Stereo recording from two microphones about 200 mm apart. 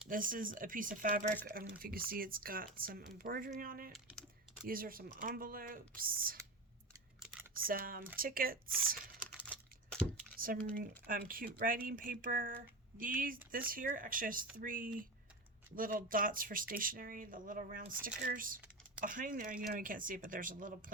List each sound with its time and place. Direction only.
0.1 s speech: 45° right (ahead or behind)
3.9 s typing: centre (ahead or behind)
4.6 s speech: 45° right (ahead or behind)
7.6 s speech: 45° right (ahead or behind)
9.3 s a sound: 5° left (ahead or behind)
10.3 s speech: 45° right (ahead or behind)